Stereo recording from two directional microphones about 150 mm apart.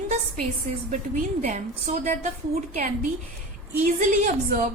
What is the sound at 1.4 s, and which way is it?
Speech, 55° right (ahead or behind).